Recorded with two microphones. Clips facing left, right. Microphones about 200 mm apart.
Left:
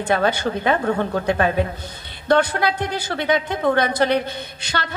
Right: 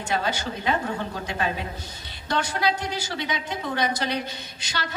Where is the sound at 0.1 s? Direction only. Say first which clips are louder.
Left 7 dB; 55° left (ahead or behind).